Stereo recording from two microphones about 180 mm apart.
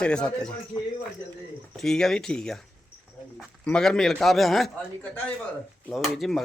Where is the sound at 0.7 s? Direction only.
25° left (ahead or behind).